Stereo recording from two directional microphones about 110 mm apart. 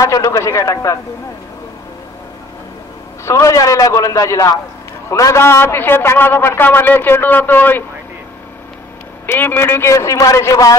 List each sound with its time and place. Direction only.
0.0 s a man's voice: 30° left (ahead or behind)
3.3 s a man's voice: 25° left (ahead or behind)
9.2 s a man's voice: 20° left (ahead or behind)